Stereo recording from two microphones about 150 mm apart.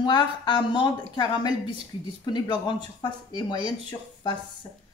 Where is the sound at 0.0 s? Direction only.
30° left (ahead or behind).